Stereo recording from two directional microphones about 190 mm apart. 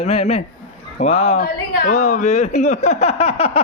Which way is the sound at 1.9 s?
40° left (ahead or behind).